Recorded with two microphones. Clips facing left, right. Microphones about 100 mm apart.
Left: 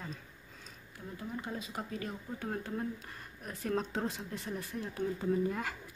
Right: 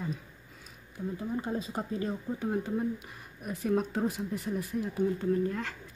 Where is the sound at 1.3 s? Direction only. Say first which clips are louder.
Right 5 dB; 30° right (ahead or behind).